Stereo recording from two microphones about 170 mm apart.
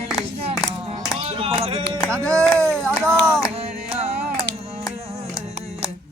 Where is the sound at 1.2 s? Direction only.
35° right (ahead or behind).